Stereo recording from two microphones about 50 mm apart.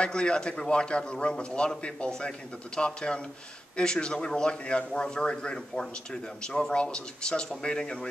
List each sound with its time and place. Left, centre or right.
0.0 s a man's voice: centre